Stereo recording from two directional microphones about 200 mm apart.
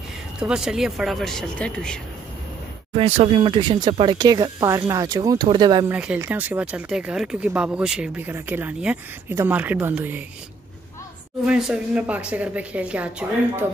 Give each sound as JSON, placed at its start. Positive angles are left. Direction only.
{"t": 0.4, "sound": "speech", "side_deg": -5}
{"t": 2.9, "sound": "speech", "side_deg": -25}
{"t": 5.9, "sound": "speech", "side_deg": -5}
{"t": 11.4, "sound": "speech", "side_deg": -5}